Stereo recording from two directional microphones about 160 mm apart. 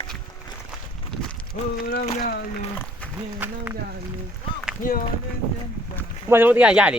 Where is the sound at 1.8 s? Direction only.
65° left (ahead or behind).